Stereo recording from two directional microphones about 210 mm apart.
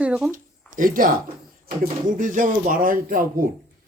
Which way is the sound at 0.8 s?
40° right (ahead or behind).